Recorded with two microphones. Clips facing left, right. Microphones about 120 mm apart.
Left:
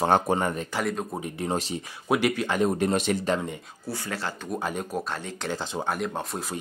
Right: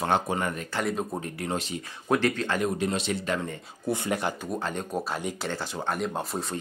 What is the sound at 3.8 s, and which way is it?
Speech, 20° right (ahead or behind).